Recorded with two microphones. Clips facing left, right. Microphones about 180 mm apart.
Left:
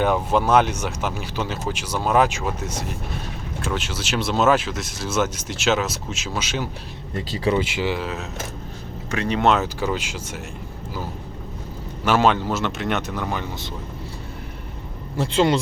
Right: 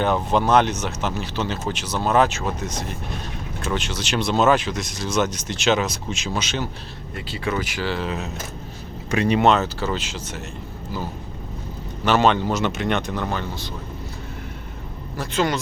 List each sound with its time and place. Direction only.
0.0 s speech: 10° left (ahead or behind)
7.2 s speech: 35° left (ahead or behind)
7.5 s speech: 20° left (ahead or behind)
8.0 s speech: centre (ahead or behind)
9.0 s speech: 15° right (ahead or behind)
9.4 s speech: 5° left (ahead or behind)
12.0 s speech: 5° left (ahead or behind)
15.1 s speech: 30° left (ahead or behind)